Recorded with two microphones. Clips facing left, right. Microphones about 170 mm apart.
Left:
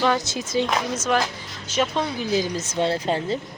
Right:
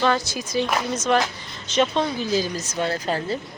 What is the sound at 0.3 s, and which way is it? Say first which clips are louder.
Speech: left 1 dB; 25° left (ahead or behind).